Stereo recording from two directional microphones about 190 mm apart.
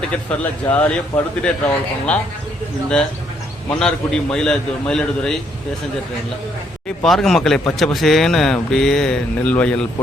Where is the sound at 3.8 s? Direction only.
5° left (ahead or behind).